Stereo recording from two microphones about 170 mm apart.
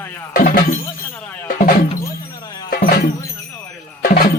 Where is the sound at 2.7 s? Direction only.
65° left (ahead or behind).